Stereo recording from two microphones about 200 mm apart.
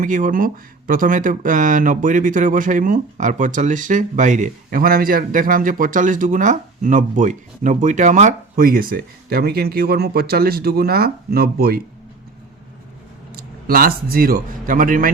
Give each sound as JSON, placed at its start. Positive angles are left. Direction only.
{"t": 0.0, "sound": "speech", "side_deg": -40}
{"t": 13.3, "sound": "a man's voice", "side_deg": -50}